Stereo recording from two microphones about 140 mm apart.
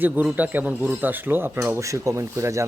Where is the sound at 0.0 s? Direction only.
10° right (ahead or behind).